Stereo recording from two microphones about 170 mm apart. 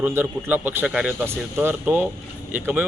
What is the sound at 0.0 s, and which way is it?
Speech, 10° right (ahead or behind).